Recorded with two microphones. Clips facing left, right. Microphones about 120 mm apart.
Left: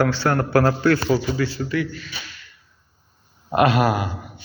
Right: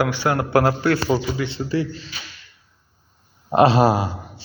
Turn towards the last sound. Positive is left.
turn(degrees=-30)  # may be behind; listen again after turning